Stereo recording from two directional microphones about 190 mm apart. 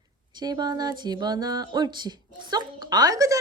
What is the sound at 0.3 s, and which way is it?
Speech, 20° right (ahead or behind).